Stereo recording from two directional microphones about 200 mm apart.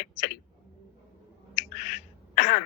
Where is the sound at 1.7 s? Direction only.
35° left (ahead or behind).